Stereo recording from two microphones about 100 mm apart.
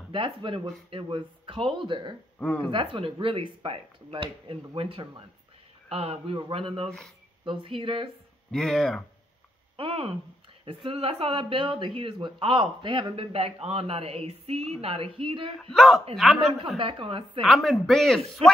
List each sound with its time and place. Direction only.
0.1 s speech: 55° right (ahead or behind)
2.3 s speech: 15° left (ahead or behind)
2.7 s speech: 60° right (ahead or behind)
5.9 s speech: 85° right; by 8.1 s 60° right (ahead or behind)
8.5 s speech: 5° left (ahead or behind)
9.8 s speech: 65° right (ahead or behind)
15.6 s speech: centre (ahead or behind)
16.7 s speech: 60° right (ahead or behind)
17.4 s speech: centre (ahead or behind)